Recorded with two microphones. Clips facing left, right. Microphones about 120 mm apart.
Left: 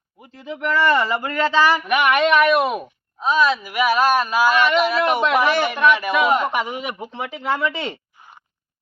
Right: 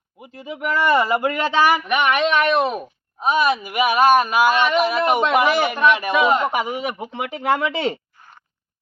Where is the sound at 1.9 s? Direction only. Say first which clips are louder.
Left 2 dB; 5° left (ahead or behind).